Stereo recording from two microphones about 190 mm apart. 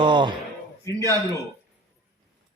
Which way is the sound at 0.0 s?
25° right (ahead or behind).